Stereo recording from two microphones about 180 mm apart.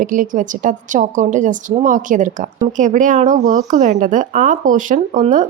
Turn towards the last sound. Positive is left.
turn(degrees=-45)  # may be behind; listen again after turning